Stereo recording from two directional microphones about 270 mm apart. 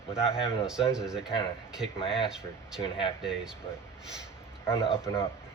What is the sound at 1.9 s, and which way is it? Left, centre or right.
Speech, centre.